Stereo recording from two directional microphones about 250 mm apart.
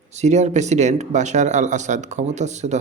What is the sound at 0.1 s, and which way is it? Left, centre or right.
Speech, right.